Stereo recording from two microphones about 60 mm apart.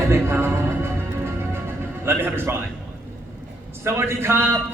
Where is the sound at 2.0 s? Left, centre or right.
Right.